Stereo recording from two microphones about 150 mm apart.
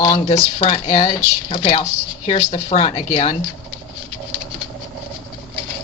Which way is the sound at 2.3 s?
50° left (ahead or behind).